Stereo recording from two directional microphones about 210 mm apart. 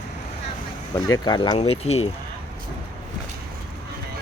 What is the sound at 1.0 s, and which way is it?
Speech, 20° left (ahead or behind).